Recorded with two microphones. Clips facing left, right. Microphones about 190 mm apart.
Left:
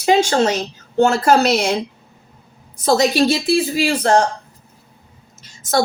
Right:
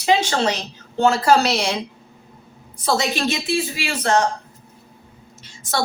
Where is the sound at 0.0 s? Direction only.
45° left (ahead or behind).